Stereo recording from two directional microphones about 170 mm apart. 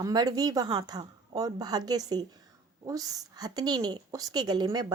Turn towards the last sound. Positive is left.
turn(degrees=-25)  # may be behind; listen again after turning